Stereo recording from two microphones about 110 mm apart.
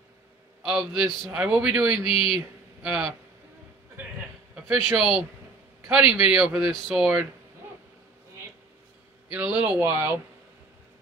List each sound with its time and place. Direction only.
0.6 s speech: 5° right (ahead or behind)
4.9 s a man's voice: 5° right (ahead or behind)
9.3 s speech: 15° right (ahead or behind)